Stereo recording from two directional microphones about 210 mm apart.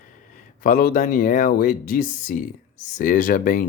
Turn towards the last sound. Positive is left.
turn(degrees=40)  # may be behind; listen again after turning